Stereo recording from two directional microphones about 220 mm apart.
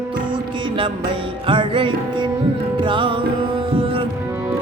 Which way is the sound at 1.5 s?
20° right (ahead or behind).